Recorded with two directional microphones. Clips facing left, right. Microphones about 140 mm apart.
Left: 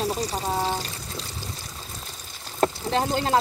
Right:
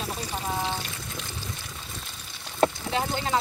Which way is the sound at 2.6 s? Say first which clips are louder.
Left 2 dB; 45° left (ahead or behind).